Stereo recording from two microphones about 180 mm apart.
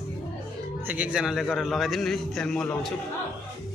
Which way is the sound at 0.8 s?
10° right (ahead or behind).